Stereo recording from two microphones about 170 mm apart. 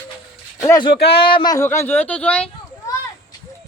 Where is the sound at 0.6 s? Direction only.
20° left (ahead or behind).